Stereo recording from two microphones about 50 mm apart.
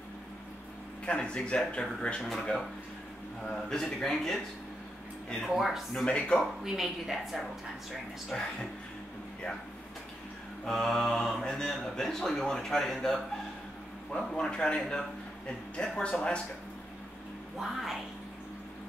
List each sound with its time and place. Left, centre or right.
1.0 s speech: centre
2.2 s a man's voice: centre
3.8 s a woman's voice: centre
5.4 s a woman's voice: centre
6.0 s speech: left
6.4 s a woman's voice: centre
8.3 s a man's voice: centre
10.6 s a man's voice: centre
14.1 s a man's voice: centre
17.6 s a woman's voice: centre